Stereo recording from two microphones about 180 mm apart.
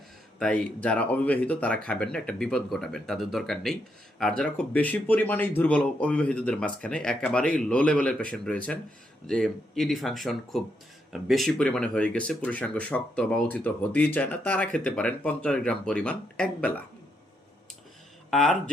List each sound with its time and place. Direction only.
0.3 s speech: 5° left (ahead or behind)
18.3 s speech: 5° left (ahead or behind)